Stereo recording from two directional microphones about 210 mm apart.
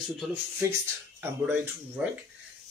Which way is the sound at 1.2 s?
10° right (ahead or behind).